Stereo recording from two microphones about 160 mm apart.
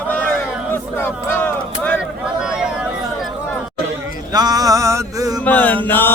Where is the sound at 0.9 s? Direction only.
10° left (ahead or behind).